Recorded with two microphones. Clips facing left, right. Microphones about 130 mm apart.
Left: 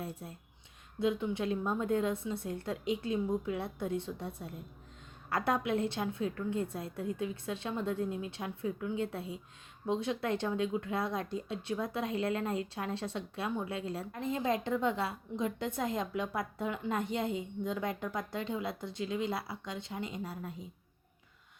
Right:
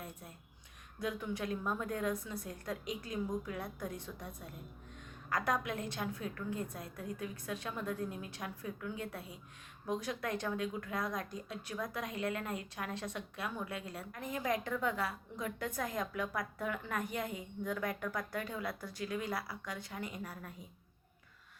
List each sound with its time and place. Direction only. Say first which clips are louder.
0.0 s a woman's voice: left 7 dB; 30° left (ahead or behind)